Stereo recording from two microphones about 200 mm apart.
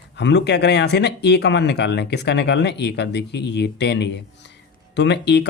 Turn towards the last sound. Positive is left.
turn(degrees=60)  # may be behind; listen again after turning